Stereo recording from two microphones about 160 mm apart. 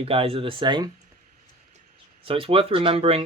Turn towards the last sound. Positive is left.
turn(degrees=-35)  # may be behind; listen again after turning